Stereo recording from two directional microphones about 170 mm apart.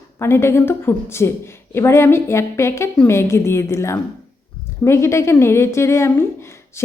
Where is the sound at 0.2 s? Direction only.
15° left (ahead or behind).